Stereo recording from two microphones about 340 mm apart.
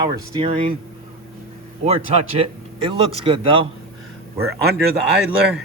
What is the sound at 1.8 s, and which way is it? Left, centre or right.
Speech, centre.